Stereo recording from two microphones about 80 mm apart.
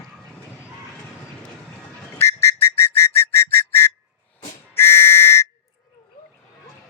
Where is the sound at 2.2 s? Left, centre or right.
Left.